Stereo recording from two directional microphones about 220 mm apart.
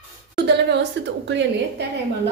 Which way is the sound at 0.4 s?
50° right (ahead or behind).